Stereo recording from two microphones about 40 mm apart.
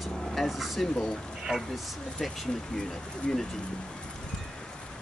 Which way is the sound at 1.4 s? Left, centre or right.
Centre.